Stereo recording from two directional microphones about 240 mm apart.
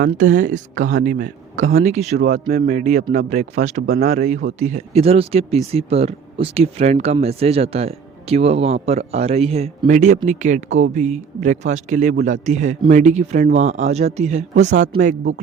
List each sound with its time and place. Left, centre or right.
0.0 s a man's voice: right